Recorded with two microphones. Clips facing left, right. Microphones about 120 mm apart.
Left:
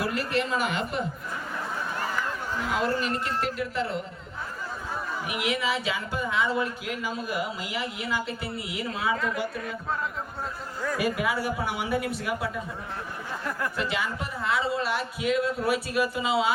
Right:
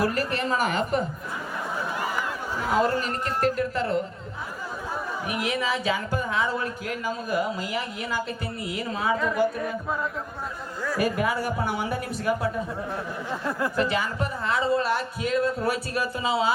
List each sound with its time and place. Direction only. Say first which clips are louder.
0.0 s speech: right 2 dB; 40° right (ahead or behind)
3.0 s speech: right 3 dB; 45° right (ahead or behind)
5.3 s speech: right 1 dB; 40° right (ahead or behind)
11.0 s speech: right 2 dB; 45° right (ahead or behind)
13.7 s speech: right 4 dB; 40° right (ahead or behind)